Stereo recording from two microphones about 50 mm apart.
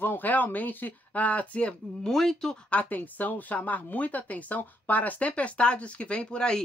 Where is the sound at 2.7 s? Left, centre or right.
Left.